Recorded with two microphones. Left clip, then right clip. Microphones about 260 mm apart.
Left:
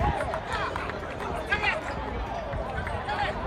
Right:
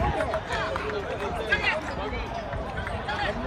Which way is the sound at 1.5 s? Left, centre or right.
Left.